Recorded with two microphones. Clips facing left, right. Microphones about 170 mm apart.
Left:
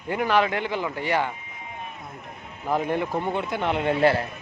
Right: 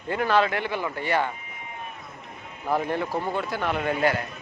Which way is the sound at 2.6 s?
15° left (ahead or behind).